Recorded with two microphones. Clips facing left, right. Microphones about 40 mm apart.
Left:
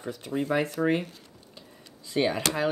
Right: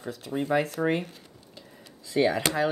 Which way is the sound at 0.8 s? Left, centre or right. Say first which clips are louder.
Left 1 dB; centre.